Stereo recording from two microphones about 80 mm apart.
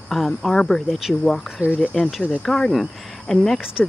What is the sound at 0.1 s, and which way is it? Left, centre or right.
Speech, centre.